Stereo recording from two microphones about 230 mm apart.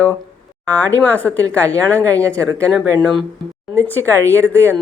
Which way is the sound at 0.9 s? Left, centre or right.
Centre.